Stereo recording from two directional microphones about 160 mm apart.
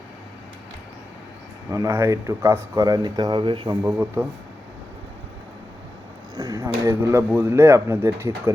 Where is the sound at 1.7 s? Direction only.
20° right (ahead or behind).